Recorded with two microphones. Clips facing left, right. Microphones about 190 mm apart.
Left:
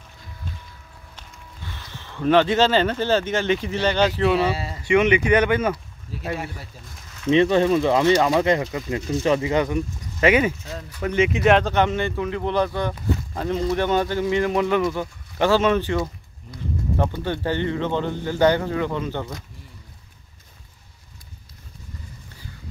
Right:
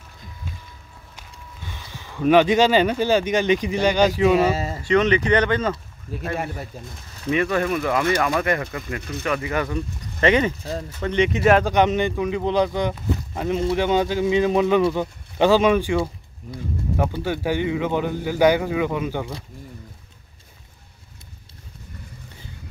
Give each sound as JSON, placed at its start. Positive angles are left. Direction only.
{"t": 1.7, "sound": "speech", "side_deg": -10}
{"t": 4.4, "sound": "speech", "side_deg": -45}
{"t": 4.8, "sound": "speech", "side_deg": 10}
{"t": 6.3, "sound": "speech", "side_deg": -50}
{"t": 7.2, "sound": "speech", "side_deg": 25}
{"t": 10.6, "sound": "speech", "side_deg": -35}
{"t": 11.0, "sound": "speech", "side_deg": 5}